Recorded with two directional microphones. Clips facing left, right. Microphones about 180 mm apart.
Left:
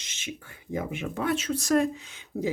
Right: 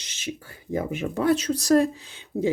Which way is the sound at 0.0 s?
35° right (ahead or behind).